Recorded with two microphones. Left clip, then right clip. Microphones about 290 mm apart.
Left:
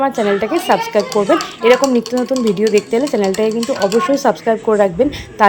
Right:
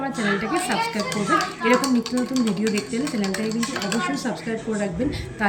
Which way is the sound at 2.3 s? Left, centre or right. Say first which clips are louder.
Left 11 dB; centre.